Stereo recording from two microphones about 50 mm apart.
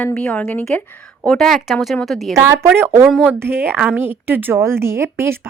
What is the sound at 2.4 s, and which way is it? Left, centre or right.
Speech, right.